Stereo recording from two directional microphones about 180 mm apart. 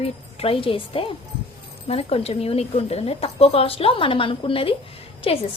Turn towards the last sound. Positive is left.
turn(degrees=30)  # may be behind; listen again after turning